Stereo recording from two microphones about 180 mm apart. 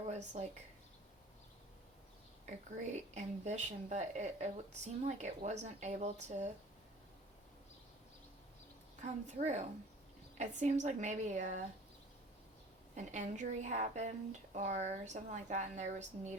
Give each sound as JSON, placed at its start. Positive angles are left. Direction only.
{"t": 0.0, "sound": "a sound", "side_deg": -40}
{"t": 2.5, "sound": "speech", "side_deg": -40}
{"t": 9.0, "sound": "speech", "side_deg": -40}
{"t": 13.0, "sound": "speech", "side_deg": -40}